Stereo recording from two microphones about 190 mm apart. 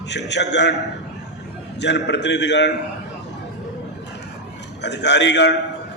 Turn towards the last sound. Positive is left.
turn(degrees=65)  # may be behind; listen again after turning